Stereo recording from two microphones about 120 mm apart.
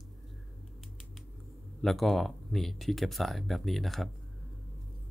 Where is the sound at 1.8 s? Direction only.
Centre (ahead or behind).